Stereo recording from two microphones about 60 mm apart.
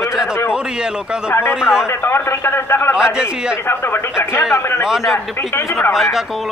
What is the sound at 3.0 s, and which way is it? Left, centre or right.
Speech, centre.